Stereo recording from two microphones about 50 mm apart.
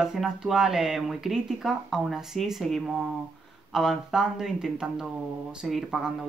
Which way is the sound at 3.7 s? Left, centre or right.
Centre.